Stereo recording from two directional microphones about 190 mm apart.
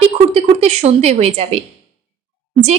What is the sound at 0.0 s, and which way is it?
A woman's voice, 30° right (ahead or behind).